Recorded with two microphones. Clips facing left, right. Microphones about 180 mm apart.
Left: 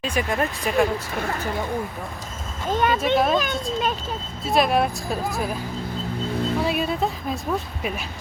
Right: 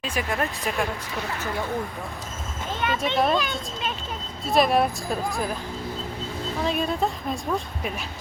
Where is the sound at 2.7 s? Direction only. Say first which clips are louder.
Left 7 dB; 45° left (ahead or behind).